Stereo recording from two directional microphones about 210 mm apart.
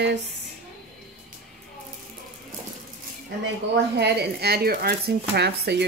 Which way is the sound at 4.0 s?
50° right (ahead or behind).